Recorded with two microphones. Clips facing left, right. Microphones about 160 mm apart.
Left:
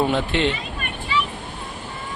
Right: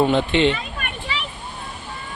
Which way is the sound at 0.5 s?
60° right (ahead or behind).